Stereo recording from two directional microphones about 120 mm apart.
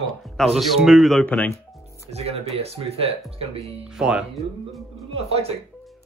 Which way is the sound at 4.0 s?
10° right (ahead or behind).